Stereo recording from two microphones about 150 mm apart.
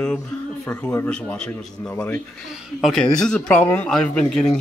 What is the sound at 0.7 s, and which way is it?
A man's voice, 5° left (ahead or behind).